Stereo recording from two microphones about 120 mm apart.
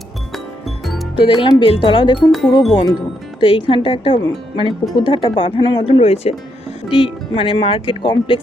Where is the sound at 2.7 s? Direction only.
35° left (ahead or behind).